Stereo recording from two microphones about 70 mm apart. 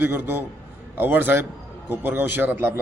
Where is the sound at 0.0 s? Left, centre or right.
Right.